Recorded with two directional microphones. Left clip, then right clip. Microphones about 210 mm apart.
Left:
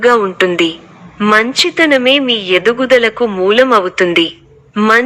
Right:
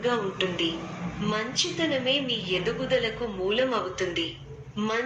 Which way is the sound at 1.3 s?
45° left (ahead or behind).